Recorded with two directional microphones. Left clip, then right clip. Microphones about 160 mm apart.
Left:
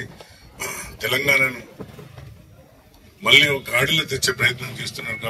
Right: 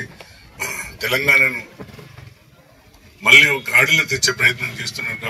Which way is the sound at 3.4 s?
25° right (ahead or behind).